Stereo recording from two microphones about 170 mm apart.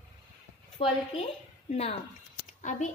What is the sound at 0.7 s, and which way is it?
A woman's voice, 35° left (ahead or behind).